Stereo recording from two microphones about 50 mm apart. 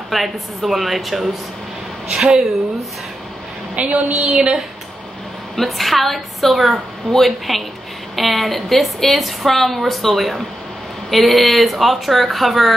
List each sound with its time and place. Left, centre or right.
0.1 s a woman's voice: centre
3.7 s a woman's voice: right
5.6 s a woman's voice: centre